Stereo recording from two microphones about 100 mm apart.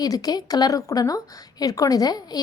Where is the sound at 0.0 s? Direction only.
40° left (ahead or behind).